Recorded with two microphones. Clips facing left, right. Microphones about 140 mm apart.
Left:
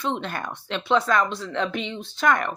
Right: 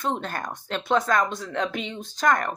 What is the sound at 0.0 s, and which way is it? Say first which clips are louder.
Speech: even; 45° right (ahead or behind).